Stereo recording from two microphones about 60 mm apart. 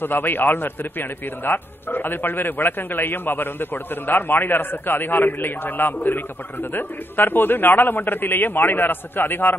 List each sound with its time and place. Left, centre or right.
0.0 s a man's voice: left